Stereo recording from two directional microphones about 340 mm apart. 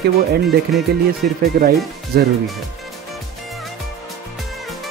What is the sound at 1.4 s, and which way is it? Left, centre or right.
Speech, right.